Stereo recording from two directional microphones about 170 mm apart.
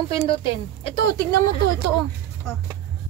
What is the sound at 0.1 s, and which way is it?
A woman's voice, 30° left (ahead or behind).